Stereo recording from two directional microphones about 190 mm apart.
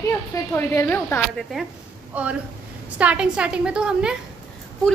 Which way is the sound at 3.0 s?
5° right (ahead or behind).